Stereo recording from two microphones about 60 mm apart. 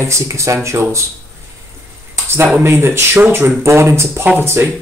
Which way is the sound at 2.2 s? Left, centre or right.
Right.